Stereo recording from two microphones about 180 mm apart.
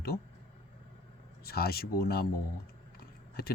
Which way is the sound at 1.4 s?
60° left (ahead or behind).